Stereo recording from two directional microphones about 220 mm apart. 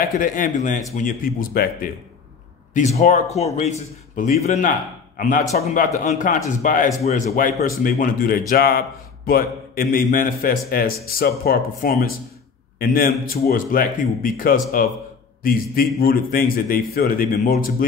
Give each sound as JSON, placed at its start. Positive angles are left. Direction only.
{"t": 0.0, "sound": "a man's voice", "side_deg": 40}